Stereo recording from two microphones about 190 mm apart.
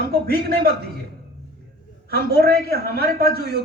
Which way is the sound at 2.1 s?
55° right (ahead or behind).